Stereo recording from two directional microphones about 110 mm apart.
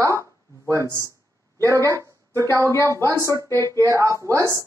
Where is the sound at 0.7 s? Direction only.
25° right (ahead or behind).